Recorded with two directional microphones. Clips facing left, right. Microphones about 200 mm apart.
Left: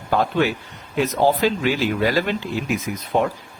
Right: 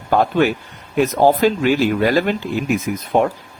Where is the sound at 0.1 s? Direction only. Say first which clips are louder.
Right 4 dB; 50° right (ahead or behind).